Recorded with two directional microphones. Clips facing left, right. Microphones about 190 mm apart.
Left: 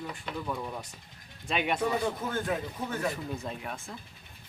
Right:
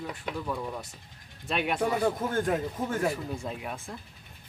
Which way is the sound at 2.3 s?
45° right (ahead or behind).